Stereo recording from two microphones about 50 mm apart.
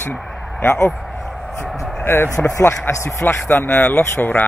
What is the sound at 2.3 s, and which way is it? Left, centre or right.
Speech, left.